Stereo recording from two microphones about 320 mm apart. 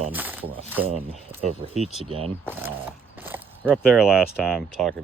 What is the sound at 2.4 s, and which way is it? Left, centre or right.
Speech, centre.